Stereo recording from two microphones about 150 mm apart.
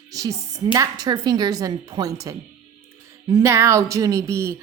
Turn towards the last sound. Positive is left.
turn(degrees=-20)  # may be behind; listen again after turning